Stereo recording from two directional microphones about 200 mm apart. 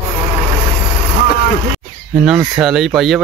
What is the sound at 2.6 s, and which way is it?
Speech, centre (ahead or behind).